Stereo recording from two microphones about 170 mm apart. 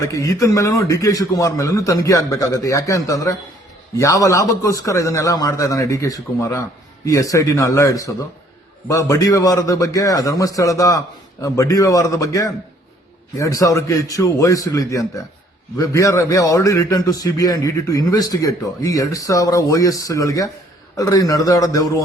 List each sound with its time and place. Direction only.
0.0 s a man's voice: 20° left (ahead or behind)